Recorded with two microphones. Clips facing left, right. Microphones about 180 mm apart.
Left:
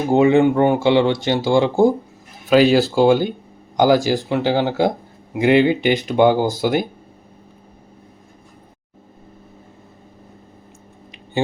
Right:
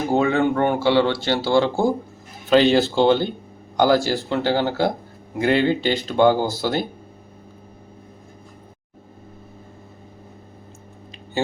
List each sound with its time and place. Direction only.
0.1 s speech: 20° left (ahead or behind)